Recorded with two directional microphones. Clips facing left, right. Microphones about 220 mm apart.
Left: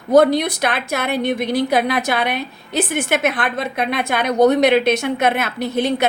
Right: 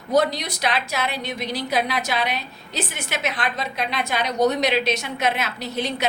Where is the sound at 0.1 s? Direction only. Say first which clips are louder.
Left 8 dB; 55° left (ahead or behind).